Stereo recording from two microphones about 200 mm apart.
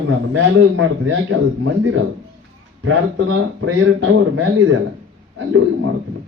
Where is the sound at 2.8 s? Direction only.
90° right.